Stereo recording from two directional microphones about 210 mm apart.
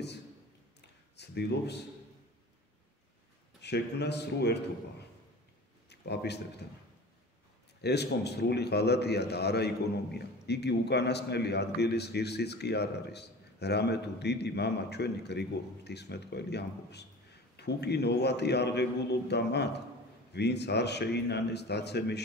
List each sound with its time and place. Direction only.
1.1 s speech: 55° left (ahead or behind)
3.6 s a man's voice: 55° left (ahead or behind)
5.9 s speech: 55° left (ahead or behind)
7.8 s a man's voice: 50° left (ahead or behind)